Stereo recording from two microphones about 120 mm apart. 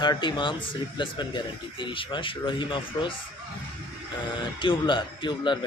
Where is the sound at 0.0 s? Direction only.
40° left (ahead or behind).